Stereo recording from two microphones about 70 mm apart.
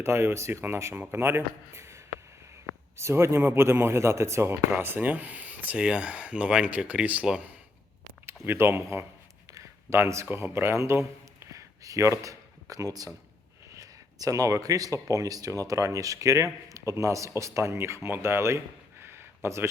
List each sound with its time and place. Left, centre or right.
0.0 s speech: right
3.0 s speech: right
4.8 s speech: right
8.4 s speech: right
9.5 s a sound: right
10.2 s a man's voice: right
19.0 s a sound: right